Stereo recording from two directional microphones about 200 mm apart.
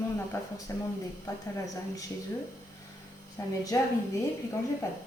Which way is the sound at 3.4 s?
15° left (ahead or behind).